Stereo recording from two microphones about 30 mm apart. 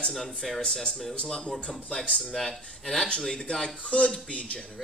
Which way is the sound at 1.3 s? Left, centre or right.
Centre.